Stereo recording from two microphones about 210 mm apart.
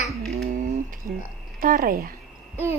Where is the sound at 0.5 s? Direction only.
40° right (ahead or behind).